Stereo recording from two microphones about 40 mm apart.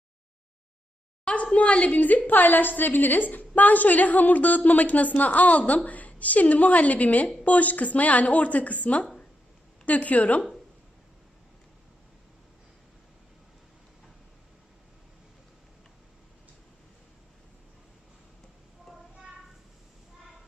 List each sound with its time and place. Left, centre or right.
1.2 s a sound: left
1.5 s a woman's voice: left
2.0 s a woman's voice: left